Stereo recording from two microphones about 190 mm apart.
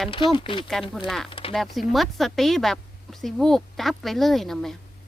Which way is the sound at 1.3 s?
30° left (ahead or behind).